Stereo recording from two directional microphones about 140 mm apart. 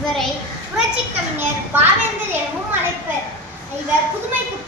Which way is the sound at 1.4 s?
15° right (ahead or behind).